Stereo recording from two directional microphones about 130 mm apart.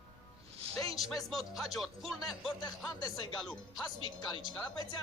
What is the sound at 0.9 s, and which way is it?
Speech, centre (ahead or behind).